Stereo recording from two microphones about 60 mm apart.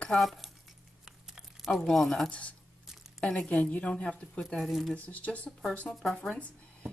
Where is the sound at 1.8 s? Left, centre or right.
Centre.